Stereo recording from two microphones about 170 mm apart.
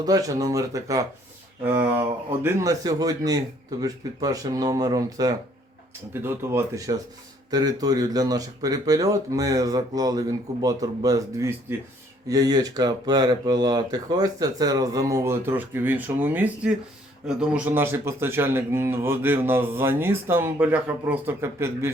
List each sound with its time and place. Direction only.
0.0 s speech: 20° right (ahead or behind)